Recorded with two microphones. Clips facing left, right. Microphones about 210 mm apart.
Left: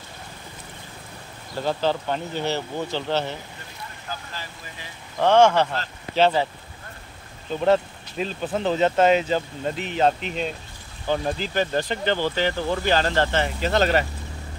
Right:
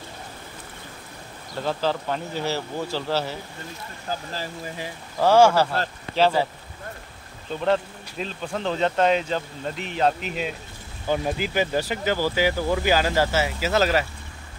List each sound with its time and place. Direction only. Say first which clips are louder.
1.6 s speech: left 1 dB; centre (ahead or behind)
4.1 s speech: right 6 dB; 35° right (ahead or behind)
5.2 s speech: even; 5° right (ahead or behind)
7.6 s speech: left 3 dB; 5° left (ahead or behind)